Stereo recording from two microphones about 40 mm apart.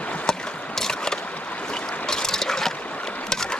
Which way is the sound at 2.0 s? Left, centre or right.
Centre.